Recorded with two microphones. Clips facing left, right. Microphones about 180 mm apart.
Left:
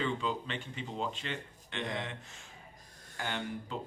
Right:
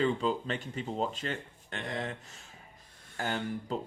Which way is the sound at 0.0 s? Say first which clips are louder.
Right 5 dB; 40° right (ahead or behind).